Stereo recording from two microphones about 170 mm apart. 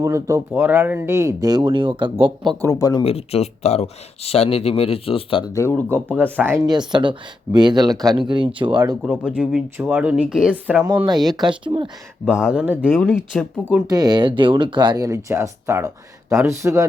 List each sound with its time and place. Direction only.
0.0 s speech: 20° right (ahead or behind)
2.6 s speech: 20° left (ahead or behind)
3.0 s speech: 35° left (ahead or behind)
5.5 s speech: 10° left (ahead or behind)
6.3 s speech: 15° right (ahead or behind)
6.7 s speech: 25° right (ahead or behind)
9.0 s speech: 5° right (ahead or behind)
11.6 s speech: 30° right (ahead or behind)
12.2 s speech: 5° right (ahead or behind)
12.9 s speech: 5° left (ahead or behind)
13.8 s speech: 20° right (ahead or behind)